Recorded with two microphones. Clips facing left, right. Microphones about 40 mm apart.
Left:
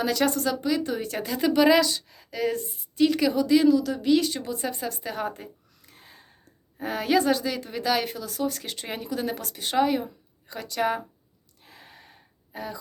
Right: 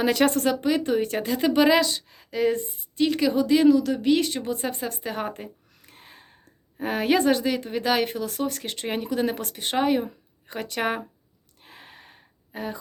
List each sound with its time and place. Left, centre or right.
0.0 s speech: right
3.0 s speech: centre
5.4 s a sound: right
6.7 s speech: right
8.5 s speech: centre; by 11.0 s right
11.6 s gasp: right